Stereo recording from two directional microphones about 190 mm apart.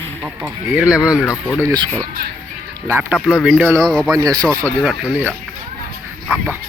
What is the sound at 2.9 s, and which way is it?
Speech, 10° right (ahead or behind).